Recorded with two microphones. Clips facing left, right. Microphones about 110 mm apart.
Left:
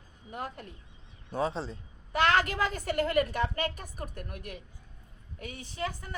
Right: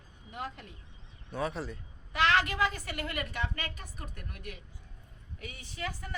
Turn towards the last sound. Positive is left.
turn(degrees=40)  # may be behind; listen again after turning